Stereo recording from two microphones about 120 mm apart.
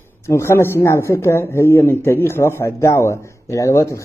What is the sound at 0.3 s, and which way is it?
A man's voice, 20° left (ahead or behind).